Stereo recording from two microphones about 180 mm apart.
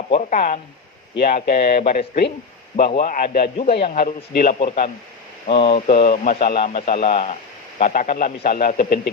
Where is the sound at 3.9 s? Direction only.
50° left (ahead or behind).